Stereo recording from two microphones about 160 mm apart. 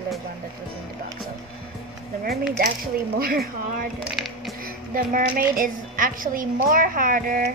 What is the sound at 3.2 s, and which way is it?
Speech, 65° right (ahead or behind).